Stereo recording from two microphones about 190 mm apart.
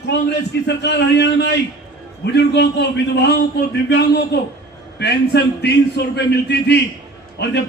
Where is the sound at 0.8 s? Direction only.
65° left (ahead or behind).